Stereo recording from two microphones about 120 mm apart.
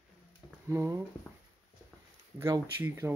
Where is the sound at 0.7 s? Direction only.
25° right (ahead or behind).